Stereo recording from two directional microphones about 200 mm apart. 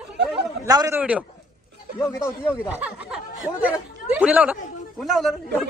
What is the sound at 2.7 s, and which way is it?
Speech, 5° right (ahead or behind).